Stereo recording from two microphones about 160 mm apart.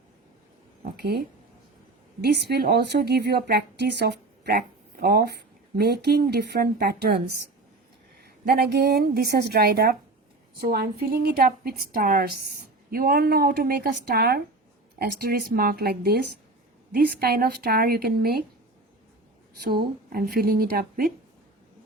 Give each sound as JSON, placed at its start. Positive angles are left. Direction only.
{"t": 0.9, "sound": "speech", "side_deg": -85}
{"t": 2.2, "sound": "speech", "side_deg": -90}
{"t": 5.8, "sound": "speech", "side_deg": -80}
{"t": 8.2, "sound": "a woman's voice", "side_deg": -80}
{"t": 14.9, "sound": "a woman's voice", "side_deg": -70}
{"t": 19.8, "sound": "a woman's voice", "side_deg": -70}